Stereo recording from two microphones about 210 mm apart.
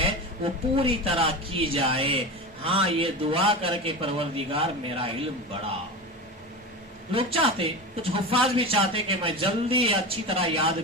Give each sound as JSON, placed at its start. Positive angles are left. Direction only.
{"t": 0.0, "sound": "speech", "side_deg": -25}
{"t": 7.1, "sound": "speech", "side_deg": -25}